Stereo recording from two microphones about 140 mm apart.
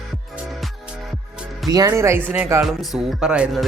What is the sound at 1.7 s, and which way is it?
Speech, 25° right (ahead or behind).